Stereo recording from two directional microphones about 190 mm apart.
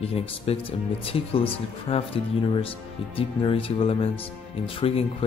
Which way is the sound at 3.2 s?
30° left (ahead or behind).